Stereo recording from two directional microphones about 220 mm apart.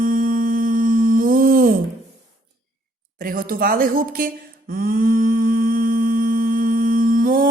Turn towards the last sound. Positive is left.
turn(degrees=-40)  # may be behind; listen again after turning